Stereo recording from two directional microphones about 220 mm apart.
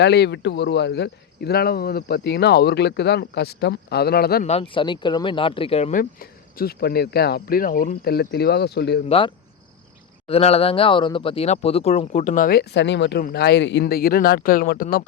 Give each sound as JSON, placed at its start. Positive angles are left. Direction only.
{"t": 0.0, "sound": "speech", "side_deg": 50}
{"t": 4.4, "sound": "speech", "side_deg": 25}
{"t": 9.0, "sound": "speech", "side_deg": 25}